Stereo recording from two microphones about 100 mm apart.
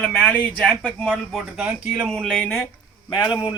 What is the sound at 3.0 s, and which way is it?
Speech, 45° left (ahead or behind).